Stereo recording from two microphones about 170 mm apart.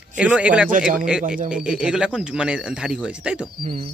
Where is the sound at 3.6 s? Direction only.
30° right (ahead or behind).